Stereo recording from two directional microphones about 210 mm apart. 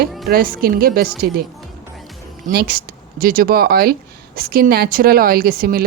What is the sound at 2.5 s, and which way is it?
Speech, 45° right (ahead or behind).